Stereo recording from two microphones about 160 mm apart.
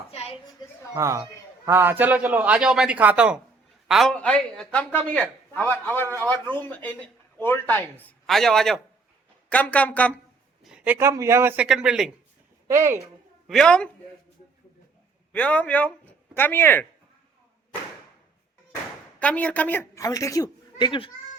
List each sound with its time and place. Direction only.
0.1 s children playing: 40° left (ahead or behind)
0.6 s a sound: 25° left (ahead or behind)
0.9 s a man's voice: 20° right (ahead or behind); by 10.2 s 10° left (ahead or behind)
10.6 s a man's voice: 5° right (ahead or behind)
12.6 s speech: 15° right (ahead or behind)
13.5 s speech: 5° left (ahead or behind)
15.3 s speech: 10° left (ahead or behind)
19.2 s a woman's voice: 10° left (ahead or behind); by 21.1 s 30° left (ahead or behind)